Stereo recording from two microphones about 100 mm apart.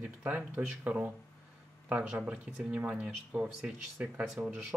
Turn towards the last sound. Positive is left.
turn(degrees=-10)  # may be behind; listen again after turning